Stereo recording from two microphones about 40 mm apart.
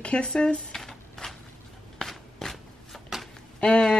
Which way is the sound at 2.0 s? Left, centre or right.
Centre.